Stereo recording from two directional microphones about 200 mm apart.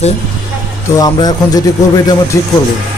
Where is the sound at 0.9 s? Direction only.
20° left (ahead or behind).